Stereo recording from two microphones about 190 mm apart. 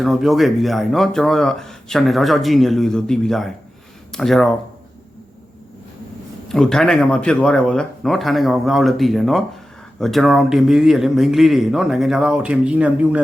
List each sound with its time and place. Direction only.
0.0 s speech: centre (ahead or behind)
6.5 s speech: 5° left (ahead or behind)